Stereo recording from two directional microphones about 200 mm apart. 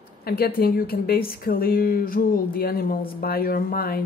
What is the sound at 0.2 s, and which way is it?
Speech, 50° left (ahead or behind).